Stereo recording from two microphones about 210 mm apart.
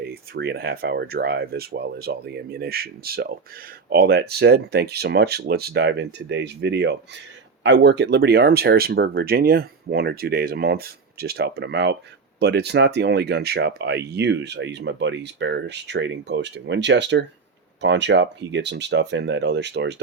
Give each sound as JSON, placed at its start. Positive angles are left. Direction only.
{"t": 0.0, "sound": "speech", "side_deg": -50}